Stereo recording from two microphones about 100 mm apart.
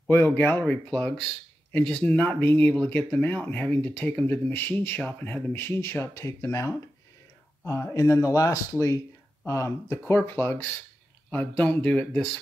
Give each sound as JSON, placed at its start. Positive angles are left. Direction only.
{"t": 0.1, "sound": "speech", "side_deg": 20}
{"t": 7.9, "sound": "speech", "side_deg": 30}